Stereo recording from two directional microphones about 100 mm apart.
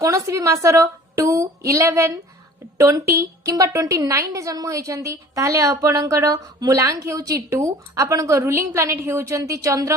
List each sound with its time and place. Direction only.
0.0 s a woman's voice: 30° right (ahead or behind)